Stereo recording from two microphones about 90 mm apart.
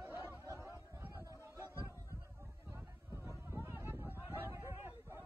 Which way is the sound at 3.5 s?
25° right (ahead or behind).